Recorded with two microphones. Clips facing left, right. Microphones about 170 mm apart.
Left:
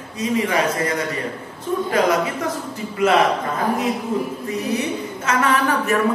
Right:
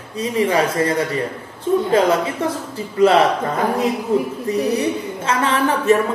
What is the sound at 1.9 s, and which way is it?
A woman's voice, 30° right (ahead or behind).